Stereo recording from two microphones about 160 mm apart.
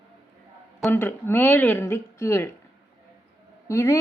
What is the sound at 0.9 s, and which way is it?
Speech, 15° left (ahead or behind).